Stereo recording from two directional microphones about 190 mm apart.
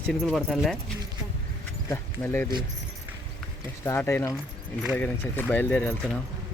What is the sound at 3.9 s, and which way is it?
Speech, 10° left (ahead or behind).